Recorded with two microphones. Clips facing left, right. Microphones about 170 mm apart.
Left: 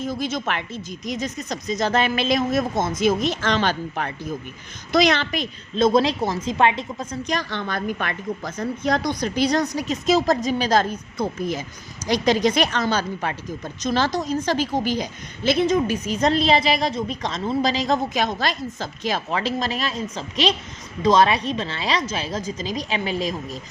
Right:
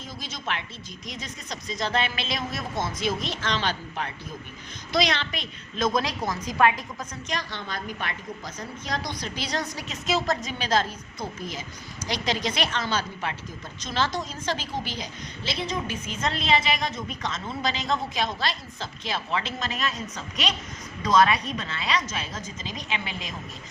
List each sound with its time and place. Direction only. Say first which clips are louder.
0.0 s a woman's voice: left 11 dB; 50° left (ahead or behind)
5.7 s a woman's voice: left 8 dB; 30° left (ahead or behind)
7.3 s a woman's voice: left 4 dB; 55° left (ahead or behind); by 10.8 s 40° left (ahead or behind)
11.2 s a woman's voice: left 9 dB; 50° left (ahead or behind); by 23.3 s 35° left (ahead or behind)